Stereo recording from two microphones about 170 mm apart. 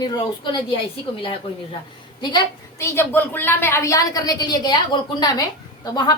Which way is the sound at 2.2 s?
20° left (ahead or behind).